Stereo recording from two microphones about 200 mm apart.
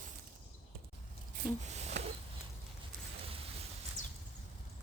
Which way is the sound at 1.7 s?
35° right (ahead or behind).